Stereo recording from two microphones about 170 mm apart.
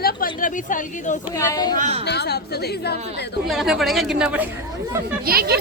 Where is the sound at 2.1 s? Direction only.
75° left (ahead or behind).